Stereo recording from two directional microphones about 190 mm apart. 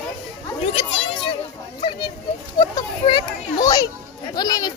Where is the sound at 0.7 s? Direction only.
30° left (ahead or behind).